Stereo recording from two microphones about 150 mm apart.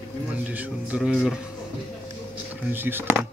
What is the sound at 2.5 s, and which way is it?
Speech, 15° right (ahead or behind).